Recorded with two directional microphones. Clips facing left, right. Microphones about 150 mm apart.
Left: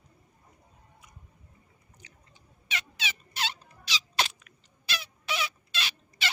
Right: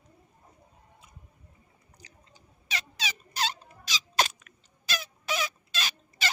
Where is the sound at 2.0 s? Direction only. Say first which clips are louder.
Right 3 dB; 35° right (ahead or behind).